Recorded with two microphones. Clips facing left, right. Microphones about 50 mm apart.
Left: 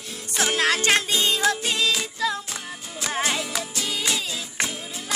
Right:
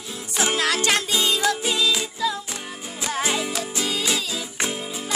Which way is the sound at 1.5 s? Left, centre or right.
Left.